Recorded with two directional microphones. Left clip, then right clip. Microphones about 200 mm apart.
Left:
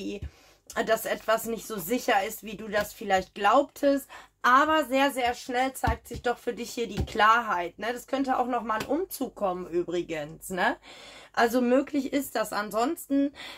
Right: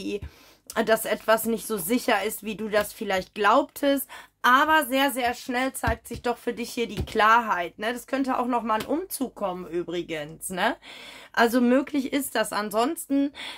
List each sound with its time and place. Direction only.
0.7 s speech: 45° right (ahead or behind)